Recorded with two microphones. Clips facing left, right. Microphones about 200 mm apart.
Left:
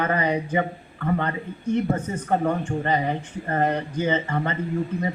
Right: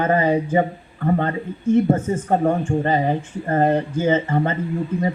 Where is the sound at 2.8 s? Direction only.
40° right (ahead or behind).